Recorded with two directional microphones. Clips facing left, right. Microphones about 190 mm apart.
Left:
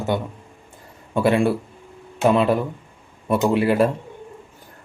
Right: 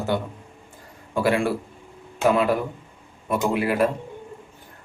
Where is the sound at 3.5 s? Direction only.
30° left (ahead or behind).